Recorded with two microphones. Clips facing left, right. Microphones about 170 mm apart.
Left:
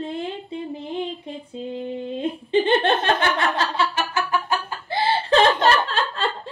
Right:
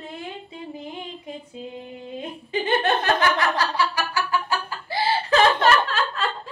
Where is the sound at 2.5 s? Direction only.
30° left (ahead or behind).